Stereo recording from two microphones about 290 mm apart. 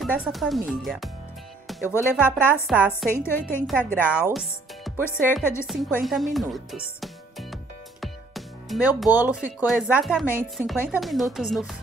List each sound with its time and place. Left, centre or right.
0.0 s speech: centre